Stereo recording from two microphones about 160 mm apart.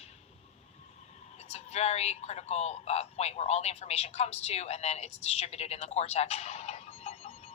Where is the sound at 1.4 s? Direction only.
40° left (ahead or behind).